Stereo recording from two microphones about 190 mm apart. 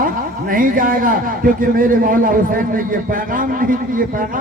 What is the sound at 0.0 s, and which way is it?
A man's voice, 45° right (ahead or behind).